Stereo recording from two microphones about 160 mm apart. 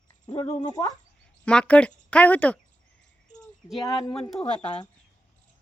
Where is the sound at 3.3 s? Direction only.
5° left (ahead or behind).